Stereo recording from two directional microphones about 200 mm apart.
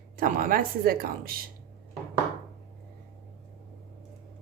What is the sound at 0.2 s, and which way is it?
Speech, 45° right (ahead or behind).